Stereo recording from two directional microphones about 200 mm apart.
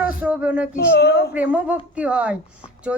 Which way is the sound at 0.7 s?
55° left (ahead or behind).